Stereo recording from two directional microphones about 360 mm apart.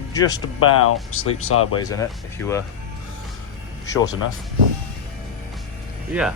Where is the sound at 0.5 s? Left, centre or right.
Left.